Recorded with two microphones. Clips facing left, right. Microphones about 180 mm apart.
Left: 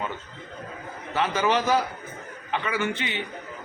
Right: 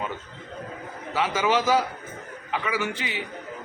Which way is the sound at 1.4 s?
5° right (ahead or behind).